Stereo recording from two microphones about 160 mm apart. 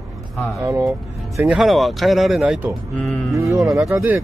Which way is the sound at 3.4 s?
20° right (ahead or behind).